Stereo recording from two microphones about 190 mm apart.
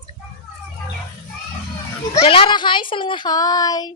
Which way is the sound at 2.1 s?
30° left (ahead or behind).